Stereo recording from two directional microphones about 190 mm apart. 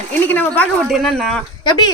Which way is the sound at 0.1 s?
10° left (ahead or behind).